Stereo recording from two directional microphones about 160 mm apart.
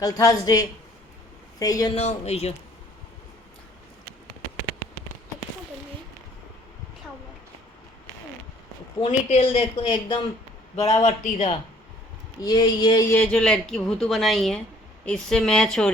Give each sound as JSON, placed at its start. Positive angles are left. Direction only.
{"t": 0.0, "sound": "speech", "side_deg": 20}
{"t": 2.0, "sound": "speech", "side_deg": 45}
{"t": 9.0, "sound": "speech", "side_deg": 40}
{"t": 10.9, "sound": "speech", "side_deg": 45}
{"t": 12.4, "sound": "speech", "side_deg": 25}
{"t": 13.1, "sound": "a woman's voice", "side_deg": 5}